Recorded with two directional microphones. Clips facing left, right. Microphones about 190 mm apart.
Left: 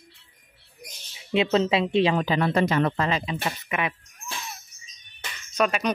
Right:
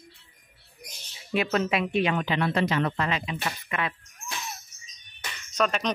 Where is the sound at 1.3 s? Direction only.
25° left (ahead or behind).